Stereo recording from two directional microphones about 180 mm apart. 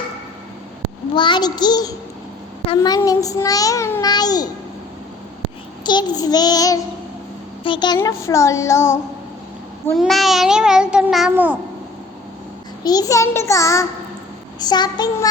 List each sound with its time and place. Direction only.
1.1 s child singing: 25° left (ahead or behind)
5.8 s child singing: 25° left (ahead or behind)
7.9 s a child's voice: 15° left (ahead or behind)
9.9 s a child's voice: centre (ahead or behind)
12.8 s a child's voice: 20° left (ahead or behind)
14.6 s child singing: 25° left (ahead or behind)